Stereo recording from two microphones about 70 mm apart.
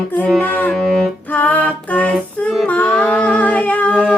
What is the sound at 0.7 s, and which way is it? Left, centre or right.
Music, centre.